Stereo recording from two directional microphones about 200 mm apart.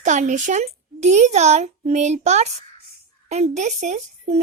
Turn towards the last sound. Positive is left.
turn(degrees=-35)  # may be behind; listen again after turning